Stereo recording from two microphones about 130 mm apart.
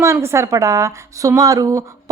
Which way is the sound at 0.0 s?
20° right (ahead or behind).